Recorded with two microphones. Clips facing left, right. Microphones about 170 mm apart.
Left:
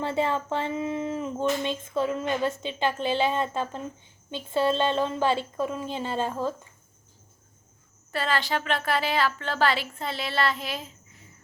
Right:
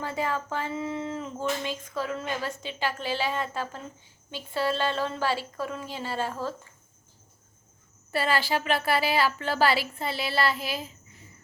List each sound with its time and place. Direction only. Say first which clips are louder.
0.0 s speech: left 4 dB; 25° left (ahead or behind)
8.1 s a woman's voice: right 1 dB; 5° right (ahead or behind)